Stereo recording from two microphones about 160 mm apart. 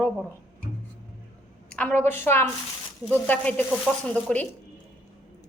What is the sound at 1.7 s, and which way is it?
A woman's voice, 10° left (ahead or behind).